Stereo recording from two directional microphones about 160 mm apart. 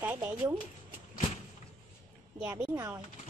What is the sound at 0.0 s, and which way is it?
Speech, 10° right (ahead or behind).